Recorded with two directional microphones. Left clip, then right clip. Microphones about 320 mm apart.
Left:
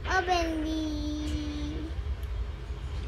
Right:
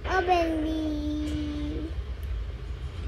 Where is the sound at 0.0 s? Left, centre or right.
Centre.